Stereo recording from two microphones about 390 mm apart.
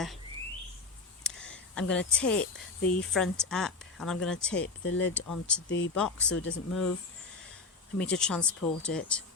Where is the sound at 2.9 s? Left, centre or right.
Centre.